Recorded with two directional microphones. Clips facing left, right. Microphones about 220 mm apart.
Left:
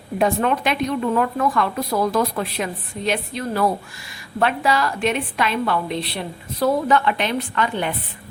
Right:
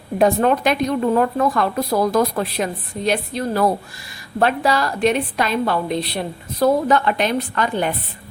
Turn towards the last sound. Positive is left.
turn(degrees=-40)  # may be behind; listen again after turning